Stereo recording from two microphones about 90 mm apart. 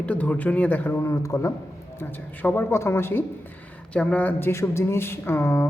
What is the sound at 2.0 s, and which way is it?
Speech, 20° left (ahead or behind).